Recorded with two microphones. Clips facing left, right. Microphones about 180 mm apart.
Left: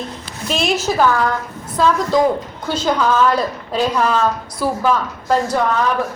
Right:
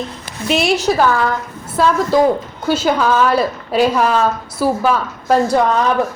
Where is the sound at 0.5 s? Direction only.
10° right (ahead or behind).